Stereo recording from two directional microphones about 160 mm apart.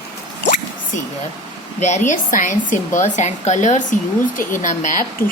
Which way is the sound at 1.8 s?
50° left (ahead or behind).